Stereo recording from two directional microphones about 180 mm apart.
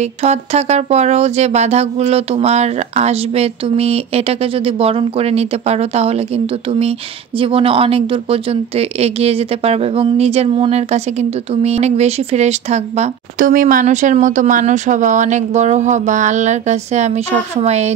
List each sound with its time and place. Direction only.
0.0 s a woman's voice: 35° right (ahead or behind)